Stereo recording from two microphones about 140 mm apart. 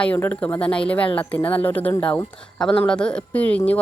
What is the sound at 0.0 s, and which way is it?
Speech, 10° left (ahead or behind).